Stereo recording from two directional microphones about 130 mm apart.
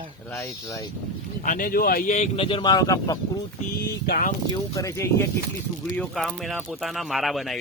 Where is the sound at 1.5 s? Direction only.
90° left.